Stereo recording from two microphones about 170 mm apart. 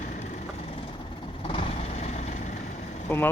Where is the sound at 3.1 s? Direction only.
15° left (ahead or behind).